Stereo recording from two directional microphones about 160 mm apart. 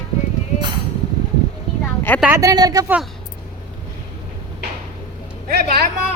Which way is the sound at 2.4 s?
25° right (ahead or behind).